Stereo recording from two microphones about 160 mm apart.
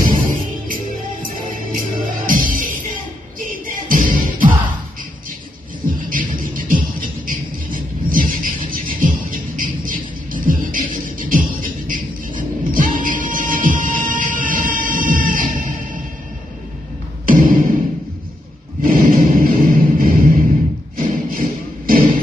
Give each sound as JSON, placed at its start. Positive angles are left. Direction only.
{"t": 0.0, "sound": "music", "side_deg": -60}
{"t": 2.2, "sound": "music", "side_deg": -60}
{"t": 6.0, "sound": "music", "side_deg": -60}
{"t": 17.3, "sound": "a sound", "side_deg": -60}
{"t": 18.8, "sound": "music", "side_deg": -65}
{"t": 20.9, "sound": "thump", "side_deg": -65}